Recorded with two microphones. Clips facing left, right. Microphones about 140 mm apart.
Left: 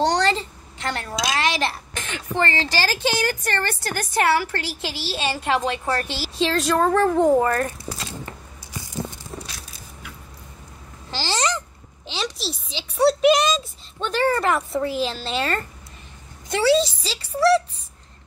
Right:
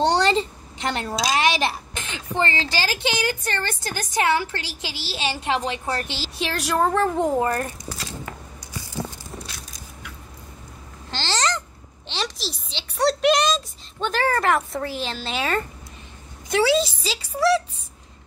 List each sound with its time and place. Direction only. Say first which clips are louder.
0.0 s a woman's voice: right 1 dB; 20° right (ahead or behind)
11.1 s babbling: left 1 dB; 10° left (ahead or behind)
12.1 s a sound: left 1 dB; centre (ahead or behind)
13.9 s speech: left 1 dB; centre (ahead or behind)
16.7 s speech: left 2 dB; 5° right (ahead or behind)